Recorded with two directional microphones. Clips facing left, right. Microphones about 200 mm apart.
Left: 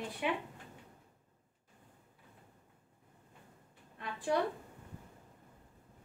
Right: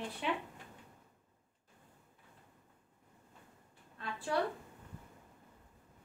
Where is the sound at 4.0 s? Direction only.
15° left (ahead or behind).